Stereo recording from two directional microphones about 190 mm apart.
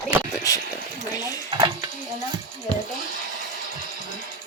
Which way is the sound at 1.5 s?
25° right (ahead or behind).